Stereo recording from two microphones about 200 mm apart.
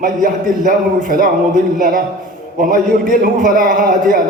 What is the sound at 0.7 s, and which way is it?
A man's voice, 45° right (ahead or behind).